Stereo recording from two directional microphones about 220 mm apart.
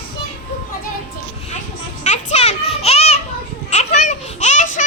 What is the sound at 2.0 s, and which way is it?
Children playing, 30° left (ahead or behind).